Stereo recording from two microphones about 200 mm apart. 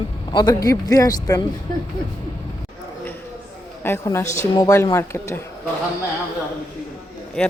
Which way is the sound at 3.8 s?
15° left (ahead or behind).